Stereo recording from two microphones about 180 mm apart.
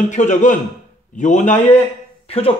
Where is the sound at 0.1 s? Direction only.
40° left (ahead or behind).